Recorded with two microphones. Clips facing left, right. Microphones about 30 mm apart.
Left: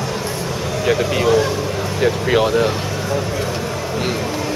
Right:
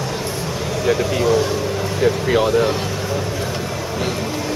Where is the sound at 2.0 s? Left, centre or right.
Centre.